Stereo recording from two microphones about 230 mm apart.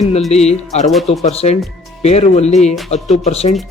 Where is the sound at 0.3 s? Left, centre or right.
Left.